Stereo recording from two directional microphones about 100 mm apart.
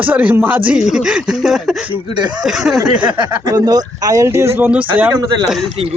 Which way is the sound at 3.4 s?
40° right (ahead or behind).